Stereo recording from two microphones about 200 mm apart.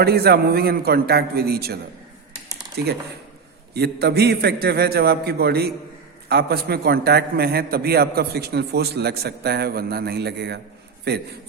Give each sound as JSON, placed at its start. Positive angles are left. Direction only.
{"t": 0.0, "sound": "a man's voice", "side_deg": -50}